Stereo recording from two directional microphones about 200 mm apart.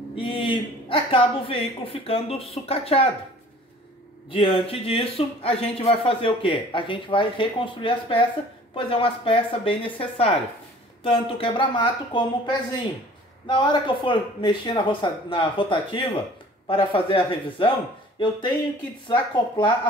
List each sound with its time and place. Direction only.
0.1 s speech: 25° left (ahead or behind)
4.3 s speech: 25° left (ahead or behind)
19.0 s speech: 25° left (ahead or behind)